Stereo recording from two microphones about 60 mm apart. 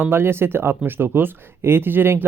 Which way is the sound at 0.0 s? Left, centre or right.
Right.